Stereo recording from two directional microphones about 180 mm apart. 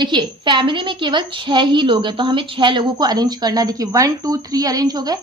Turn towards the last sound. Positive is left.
turn(degrees=-20)  # may be behind; listen again after turning